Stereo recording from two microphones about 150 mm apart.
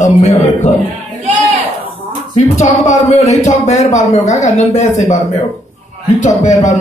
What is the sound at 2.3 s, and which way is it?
A man's voice, 50° left (ahead or behind).